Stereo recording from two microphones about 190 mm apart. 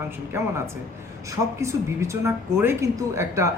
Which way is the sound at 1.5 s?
15° right (ahead or behind).